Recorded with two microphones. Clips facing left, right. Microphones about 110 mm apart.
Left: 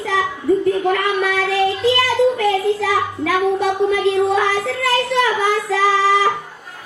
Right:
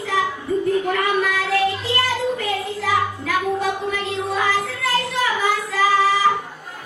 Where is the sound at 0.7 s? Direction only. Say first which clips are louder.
Left 3 dB; 70° left (ahead or behind).